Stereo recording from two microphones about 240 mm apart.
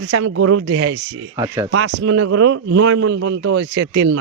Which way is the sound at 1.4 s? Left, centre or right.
Centre.